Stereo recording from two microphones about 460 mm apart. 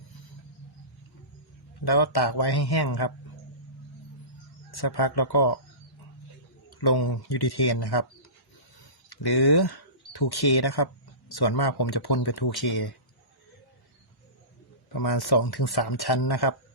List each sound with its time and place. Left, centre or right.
1.8 s speech: left
4.7 s speech: left
6.7 s speech: left
9.0 s speech: left
14.9 s speech: left